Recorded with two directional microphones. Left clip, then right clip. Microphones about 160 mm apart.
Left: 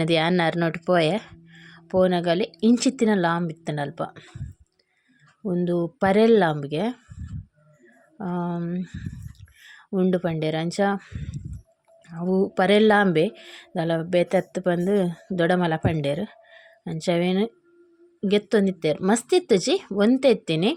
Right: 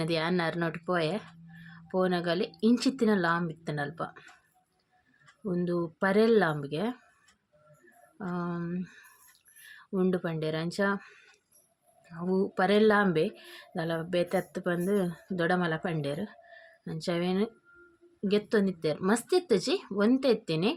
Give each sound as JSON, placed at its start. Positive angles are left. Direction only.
{"t": 0.0, "sound": "speech", "side_deg": 45}
{"t": 5.5, "sound": "speech", "side_deg": 35}
{"t": 8.2, "sound": "speech", "side_deg": 35}